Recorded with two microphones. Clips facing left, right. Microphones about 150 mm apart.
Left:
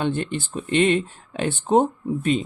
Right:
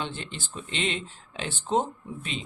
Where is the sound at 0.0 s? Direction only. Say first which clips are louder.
Left 11 dB; 55° left (ahead or behind).